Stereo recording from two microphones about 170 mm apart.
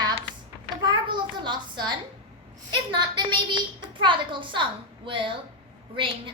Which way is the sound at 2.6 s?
25° right (ahead or behind).